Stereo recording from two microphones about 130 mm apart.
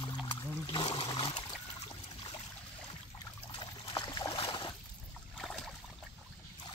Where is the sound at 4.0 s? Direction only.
35° left (ahead or behind).